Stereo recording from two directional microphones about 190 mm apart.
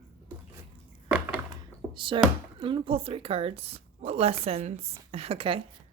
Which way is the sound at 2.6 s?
25° right (ahead or behind).